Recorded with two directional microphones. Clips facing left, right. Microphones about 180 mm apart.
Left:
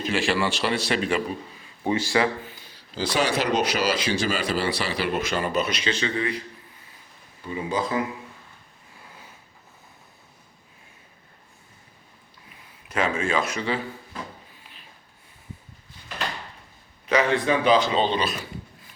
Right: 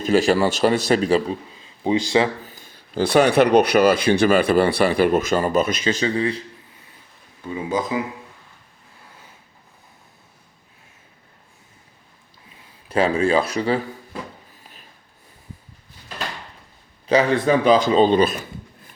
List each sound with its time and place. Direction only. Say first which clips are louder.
0.0 s speech: right 7 dB; 40° right (ahead or behind)
1.8 s speech: right 4 dB; 15° right (ahead or behind)
2.4 s speech: even; 45° right (ahead or behind)
7.9 s speech: right 2 dB; 10° right (ahead or behind)
12.9 s speech: right 7 dB; 35° right (ahead or behind)
14.6 s a sound: right 3 dB; 40° right (ahead or behind)
17.1 s speech: right 4 dB; 35° right (ahead or behind)